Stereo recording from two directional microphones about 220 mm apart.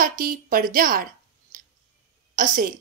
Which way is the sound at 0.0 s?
40° right (ahead or behind).